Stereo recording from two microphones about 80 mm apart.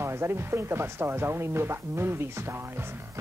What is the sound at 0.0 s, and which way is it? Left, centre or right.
Speech, right.